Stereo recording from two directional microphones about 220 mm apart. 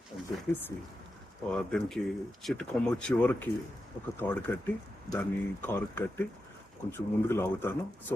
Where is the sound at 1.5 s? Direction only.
5° left (ahead or behind).